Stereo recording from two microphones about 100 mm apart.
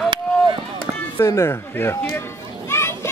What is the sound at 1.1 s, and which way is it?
Speech, 25° left (ahead or behind).